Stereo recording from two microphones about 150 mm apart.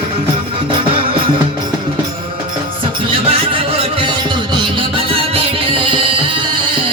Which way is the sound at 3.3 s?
40° right (ahead or behind).